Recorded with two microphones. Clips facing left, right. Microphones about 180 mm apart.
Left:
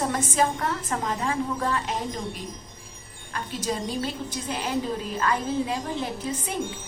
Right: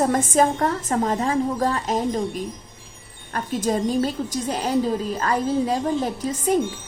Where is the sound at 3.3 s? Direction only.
50° right (ahead or behind).